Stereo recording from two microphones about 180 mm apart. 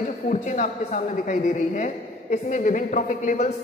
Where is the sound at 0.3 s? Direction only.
45° left (ahead or behind).